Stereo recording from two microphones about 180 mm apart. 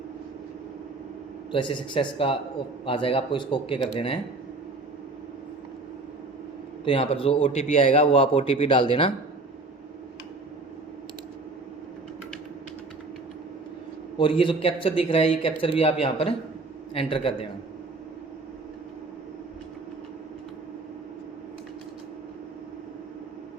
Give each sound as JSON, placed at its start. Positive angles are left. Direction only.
{"t": 1.5, "sound": "speech", "side_deg": 25}
{"t": 6.8, "sound": "speech", "side_deg": 30}
{"t": 14.2, "sound": "speech", "side_deg": 30}